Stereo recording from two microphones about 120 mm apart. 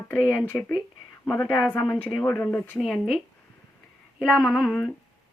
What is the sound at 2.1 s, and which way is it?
Speech, 15° left (ahead or behind).